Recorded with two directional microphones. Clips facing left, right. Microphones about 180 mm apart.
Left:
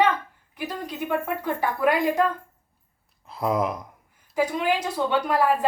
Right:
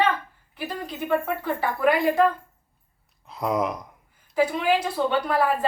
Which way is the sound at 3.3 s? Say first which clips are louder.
Left 1 dB; centre (ahead or behind).